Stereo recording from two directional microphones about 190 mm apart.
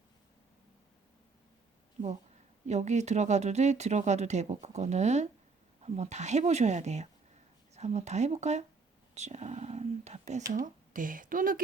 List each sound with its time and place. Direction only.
2.6 s speech: 35° right (ahead or behind)
9.1 s a sound: 35° right (ahead or behind)
10.5 s speech: 45° right (ahead or behind)